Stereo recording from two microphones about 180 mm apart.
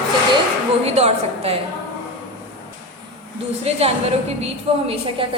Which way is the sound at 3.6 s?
35° right (ahead or behind).